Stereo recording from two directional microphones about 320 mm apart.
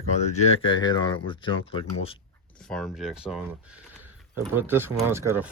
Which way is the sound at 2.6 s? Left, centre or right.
Centre.